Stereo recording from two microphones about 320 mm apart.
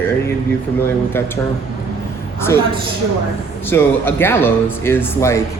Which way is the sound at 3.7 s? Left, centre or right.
Centre.